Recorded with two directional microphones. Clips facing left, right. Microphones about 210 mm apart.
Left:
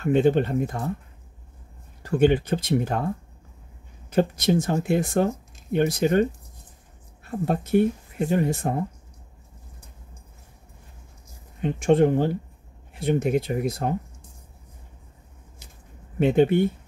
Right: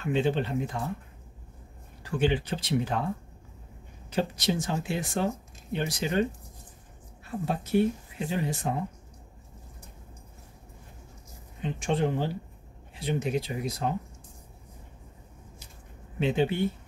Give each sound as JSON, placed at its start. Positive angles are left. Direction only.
{"t": 0.0, "sound": "speech", "side_deg": 50}
{"t": 2.0, "sound": "speech", "side_deg": 45}
{"t": 4.1, "sound": "speech", "side_deg": 50}
{"t": 7.2, "sound": "speech", "side_deg": 50}
{"t": 11.6, "sound": "speech", "side_deg": 50}
{"t": 16.2, "sound": "speech", "side_deg": 55}